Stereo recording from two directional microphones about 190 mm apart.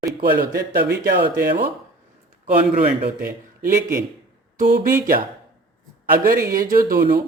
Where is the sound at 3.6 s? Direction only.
45° right (ahead or behind).